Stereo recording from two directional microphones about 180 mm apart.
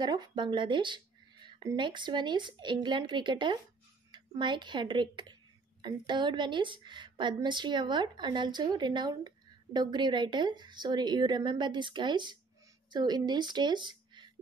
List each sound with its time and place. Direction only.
0.0 s a woman's voice: 25° right (ahead or behind)